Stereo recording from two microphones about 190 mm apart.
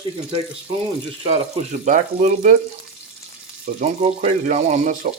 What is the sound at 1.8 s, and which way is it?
Speech, 40° right (ahead or behind).